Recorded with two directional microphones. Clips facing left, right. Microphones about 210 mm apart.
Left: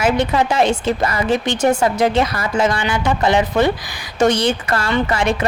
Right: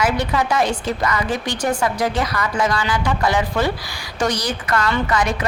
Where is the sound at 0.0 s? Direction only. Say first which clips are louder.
Left 3 dB; 25° left (ahead or behind).